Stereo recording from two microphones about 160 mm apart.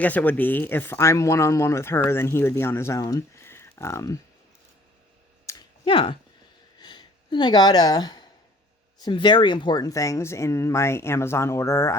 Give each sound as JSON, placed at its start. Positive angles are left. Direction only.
{"t": 0.0, "sound": "speech", "side_deg": 10}
{"t": 5.5, "sound": "a sound", "side_deg": 30}
{"t": 9.0, "sound": "speech", "side_deg": 30}